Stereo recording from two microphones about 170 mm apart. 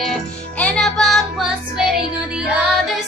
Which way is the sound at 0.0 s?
Centre (ahead or behind).